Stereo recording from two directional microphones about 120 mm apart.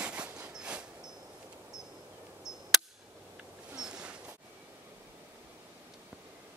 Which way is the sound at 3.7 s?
5° right (ahead or behind).